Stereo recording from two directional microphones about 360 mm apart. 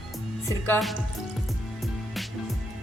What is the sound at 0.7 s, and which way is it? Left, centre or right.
Speech, centre.